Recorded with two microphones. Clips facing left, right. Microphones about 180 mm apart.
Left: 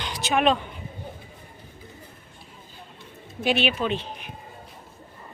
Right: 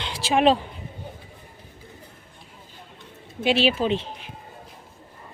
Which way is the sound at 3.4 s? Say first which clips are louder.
Right 3 dB; 25° right (ahead or behind).